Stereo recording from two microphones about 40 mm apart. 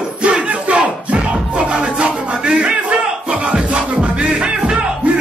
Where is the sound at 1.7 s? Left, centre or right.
Right.